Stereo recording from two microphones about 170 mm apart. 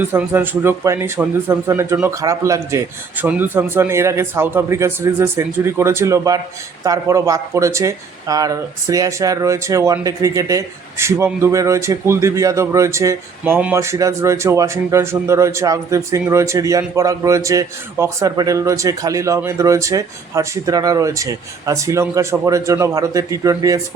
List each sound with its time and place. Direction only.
0.0 s speech: 10° right (ahead or behind)